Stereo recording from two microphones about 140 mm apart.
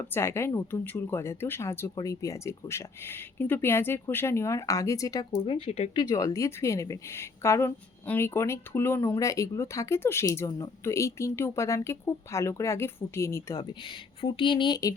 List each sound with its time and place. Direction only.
0.0 s a woman's voice: 20° left (ahead or behind)
5.5 s speech: 40° left (ahead or behind)
6.0 s a woman's voice: 25° left (ahead or behind)